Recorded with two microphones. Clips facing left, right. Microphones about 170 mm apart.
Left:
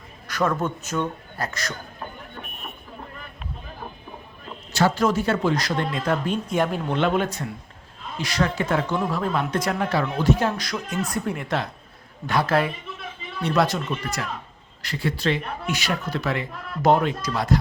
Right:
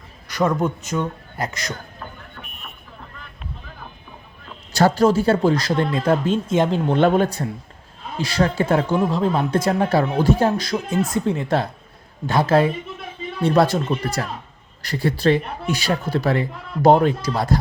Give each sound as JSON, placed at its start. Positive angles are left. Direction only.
{"t": 0.3, "sound": "speech", "side_deg": -15}
{"t": 4.7, "sound": "speech", "side_deg": -35}
{"t": 6.9, "sound": "speech", "side_deg": -40}